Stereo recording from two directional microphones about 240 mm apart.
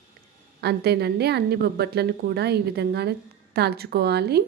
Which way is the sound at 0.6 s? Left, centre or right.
Right.